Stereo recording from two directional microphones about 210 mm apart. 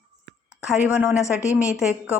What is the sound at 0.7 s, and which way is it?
Speech, 5° right (ahead or behind).